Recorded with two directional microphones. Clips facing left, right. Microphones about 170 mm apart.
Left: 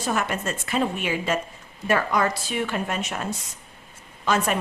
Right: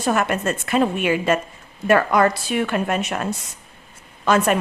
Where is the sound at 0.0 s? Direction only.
60° right (ahead or behind).